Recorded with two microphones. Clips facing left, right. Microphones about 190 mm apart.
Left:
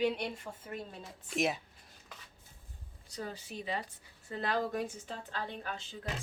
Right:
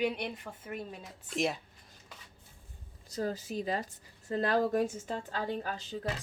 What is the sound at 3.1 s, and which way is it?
Speech, 40° right (ahead or behind).